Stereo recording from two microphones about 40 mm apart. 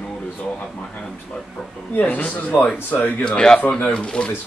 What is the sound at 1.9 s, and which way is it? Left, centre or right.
A man's voice, left.